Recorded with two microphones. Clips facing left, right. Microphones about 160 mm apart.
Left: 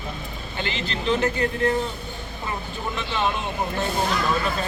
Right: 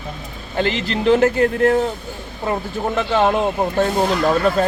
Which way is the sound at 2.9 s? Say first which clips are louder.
Right 9 dB; 60° right (ahead or behind).